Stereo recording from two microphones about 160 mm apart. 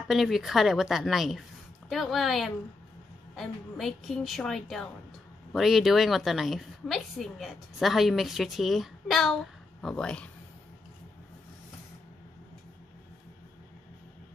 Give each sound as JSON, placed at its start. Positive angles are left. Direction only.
{"t": 0.1, "sound": "a woman's voice", "side_deg": 0}